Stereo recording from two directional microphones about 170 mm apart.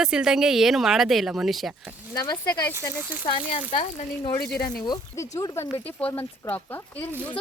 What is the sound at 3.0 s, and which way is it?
Speech, 10° right (ahead or behind).